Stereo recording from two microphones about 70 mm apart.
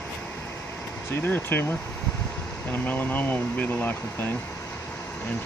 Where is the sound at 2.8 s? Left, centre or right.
Left.